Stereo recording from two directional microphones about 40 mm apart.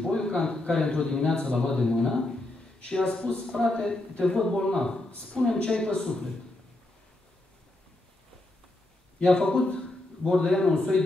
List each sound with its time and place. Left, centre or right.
0.0 s a man's voice: centre
9.2 s a man's voice: centre